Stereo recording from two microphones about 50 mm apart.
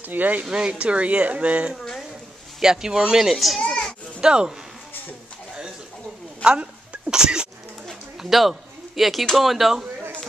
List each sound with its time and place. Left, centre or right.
0.0 s speech: right
0.5 s speech: centre
2.6 s speech: centre
3.6 s children playing: centre
4.2 s speech: centre
6.4 s a sound: right
8.2 s speech: centre